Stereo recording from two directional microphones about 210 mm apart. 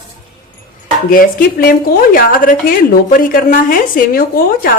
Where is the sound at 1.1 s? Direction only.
40° left (ahead or behind).